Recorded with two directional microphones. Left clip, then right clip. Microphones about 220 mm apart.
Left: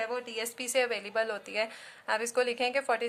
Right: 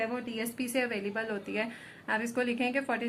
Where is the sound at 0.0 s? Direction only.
40° left (ahead or behind).